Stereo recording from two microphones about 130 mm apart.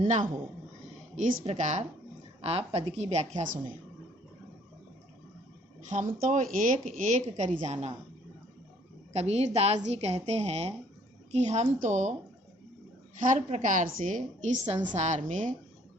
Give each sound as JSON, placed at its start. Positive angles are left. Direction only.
{"t": 1.1, "sound": "speech", "side_deg": -70}
{"t": 2.4, "sound": "a woman's voice", "side_deg": -50}
{"t": 6.1, "sound": "speech", "side_deg": -80}
{"t": 9.1, "sound": "a woman's voice", "side_deg": -55}
{"t": 13.1, "sound": "a woman's voice", "side_deg": -75}